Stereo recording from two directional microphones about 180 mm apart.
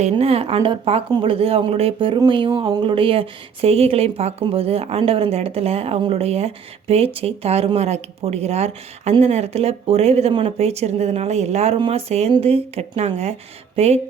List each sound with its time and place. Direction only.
0.0 s speech: 35° right (ahead or behind)